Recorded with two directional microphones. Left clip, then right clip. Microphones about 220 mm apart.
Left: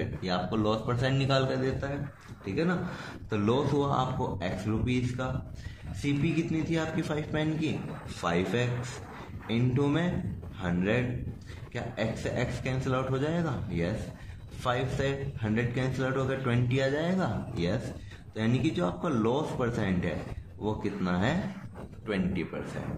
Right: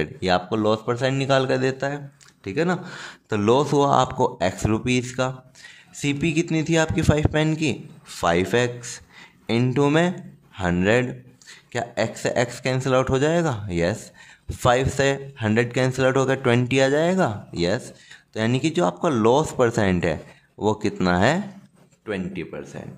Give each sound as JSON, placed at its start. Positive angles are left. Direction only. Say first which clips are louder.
{"t": 0.0, "sound": "a man's voice", "louder": "right 10 dB", "side_deg": -45}
{"t": 22.0, "sound": "a man's voice", "louder": "right 3 dB", "side_deg": -35}